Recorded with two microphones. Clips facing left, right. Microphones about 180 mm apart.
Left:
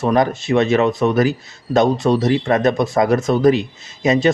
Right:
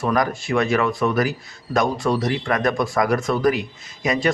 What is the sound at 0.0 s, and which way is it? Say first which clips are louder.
Speech: left 5 dB; 25° left (ahead or behind).